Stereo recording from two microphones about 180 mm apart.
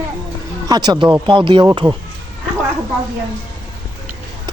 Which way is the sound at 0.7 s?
25° right (ahead or behind).